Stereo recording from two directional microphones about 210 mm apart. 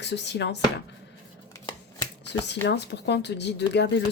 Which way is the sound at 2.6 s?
55° left (ahead or behind).